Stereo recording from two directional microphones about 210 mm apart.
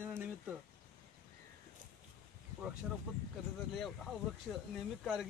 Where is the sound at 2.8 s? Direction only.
5° right (ahead or behind).